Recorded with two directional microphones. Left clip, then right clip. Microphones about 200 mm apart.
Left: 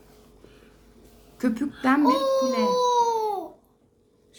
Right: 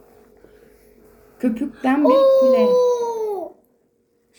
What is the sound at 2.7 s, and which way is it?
Baby cry, 25° left (ahead or behind).